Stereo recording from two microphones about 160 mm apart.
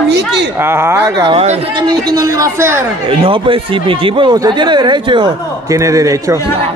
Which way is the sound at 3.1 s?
35° right (ahead or behind).